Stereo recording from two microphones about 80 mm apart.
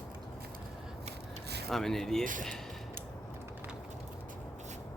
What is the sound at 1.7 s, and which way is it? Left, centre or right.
Speech, centre.